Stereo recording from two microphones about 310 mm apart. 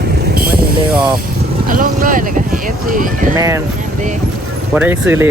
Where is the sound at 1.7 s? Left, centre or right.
Right.